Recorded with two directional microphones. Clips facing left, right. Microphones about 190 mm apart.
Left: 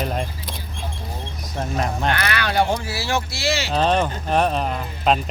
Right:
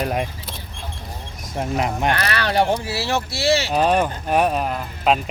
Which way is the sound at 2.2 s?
35° right (ahead or behind).